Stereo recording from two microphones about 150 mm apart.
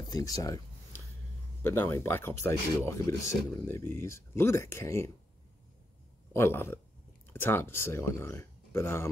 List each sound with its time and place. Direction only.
0.1 s a sound: 25° left (ahead or behind)
1.6 s speech: 15° left (ahead or behind)
6.3 s speech: 15° left (ahead or behind)